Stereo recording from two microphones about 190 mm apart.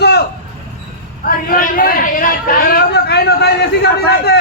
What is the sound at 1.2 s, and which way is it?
A man's voice, 45° left (ahead or behind).